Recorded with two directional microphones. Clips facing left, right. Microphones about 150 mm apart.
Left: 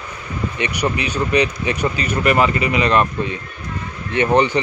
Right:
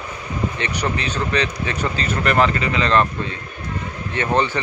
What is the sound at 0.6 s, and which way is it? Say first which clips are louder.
Speech: left 3 dB; 15° left (ahead or behind).